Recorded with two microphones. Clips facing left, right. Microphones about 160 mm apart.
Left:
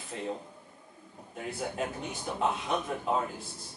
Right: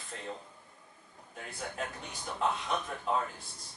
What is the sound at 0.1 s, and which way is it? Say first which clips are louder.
Speech: left 7 dB; 10° left (ahead or behind).